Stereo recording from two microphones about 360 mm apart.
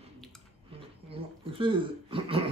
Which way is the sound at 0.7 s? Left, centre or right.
Centre.